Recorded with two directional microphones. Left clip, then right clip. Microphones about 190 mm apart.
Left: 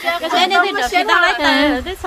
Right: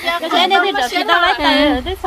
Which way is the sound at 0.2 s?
25° right (ahead or behind).